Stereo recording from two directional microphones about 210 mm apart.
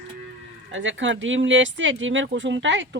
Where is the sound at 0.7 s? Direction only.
65° right (ahead or behind).